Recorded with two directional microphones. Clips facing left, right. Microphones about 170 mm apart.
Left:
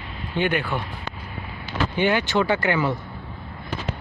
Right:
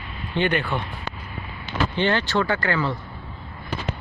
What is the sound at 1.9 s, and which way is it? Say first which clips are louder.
Speech: left 2 dB; 10° left (ahead or behind).